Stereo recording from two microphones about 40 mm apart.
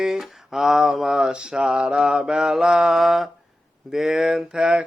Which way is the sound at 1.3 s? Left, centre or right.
Centre.